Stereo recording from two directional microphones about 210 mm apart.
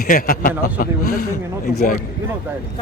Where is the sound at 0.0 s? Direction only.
40° left (ahead or behind).